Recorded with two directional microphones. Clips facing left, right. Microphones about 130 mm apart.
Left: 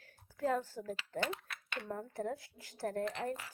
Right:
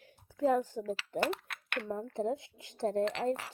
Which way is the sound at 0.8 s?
75° right (ahead or behind).